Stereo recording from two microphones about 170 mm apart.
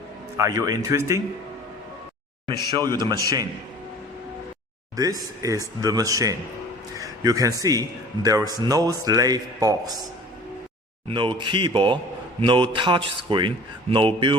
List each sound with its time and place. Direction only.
0.3 s a man's voice: 20° right (ahead or behind)
2.5 s a man's voice: 25° right (ahead or behind)
4.9 s a man's voice: 20° right (ahead or behind)
11.1 s a man's voice: 30° right (ahead or behind)